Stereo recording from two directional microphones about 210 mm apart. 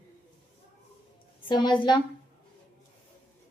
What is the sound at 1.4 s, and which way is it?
Speech, 20° left (ahead or behind).